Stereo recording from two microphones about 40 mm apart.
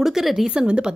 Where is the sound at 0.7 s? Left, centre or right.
Right.